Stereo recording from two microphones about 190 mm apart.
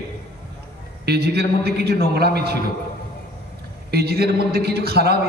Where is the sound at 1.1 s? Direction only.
55° right (ahead or behind).